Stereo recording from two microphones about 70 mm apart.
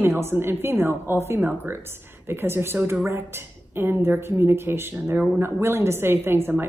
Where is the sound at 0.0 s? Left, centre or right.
Right.